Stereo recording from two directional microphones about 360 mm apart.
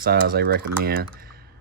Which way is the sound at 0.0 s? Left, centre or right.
Right.